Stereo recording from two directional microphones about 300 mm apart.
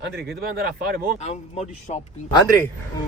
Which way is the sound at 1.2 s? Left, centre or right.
Left.